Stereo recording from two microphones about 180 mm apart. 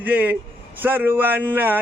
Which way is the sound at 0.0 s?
10° right (ahead or behind).